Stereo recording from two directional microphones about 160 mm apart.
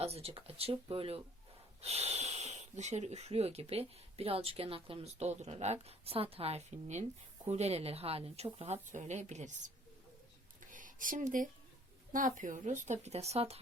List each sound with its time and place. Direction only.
0.0 s a woman's voice: 40° right (ahead or behind)
10.6 s a sound: 55° right (ahead or behind)
12.1 s a woman's voice: 55° right (ahead or behind)